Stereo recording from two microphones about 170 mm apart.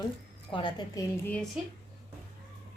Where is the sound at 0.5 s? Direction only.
25° left (ahead or behind).